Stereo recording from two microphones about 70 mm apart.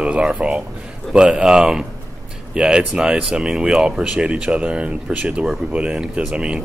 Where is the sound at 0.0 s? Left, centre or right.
Centre.